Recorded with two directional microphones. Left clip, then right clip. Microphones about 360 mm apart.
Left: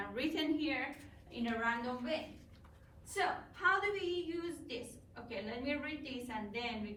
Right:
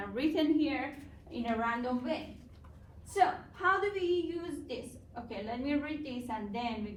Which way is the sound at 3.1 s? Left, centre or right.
Centre.